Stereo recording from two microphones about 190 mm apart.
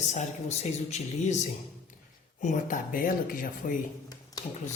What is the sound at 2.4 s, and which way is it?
Speech, 45° left (ahead or behind).